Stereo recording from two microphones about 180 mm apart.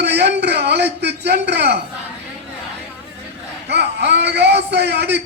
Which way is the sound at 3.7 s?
70° right (ahead or behind).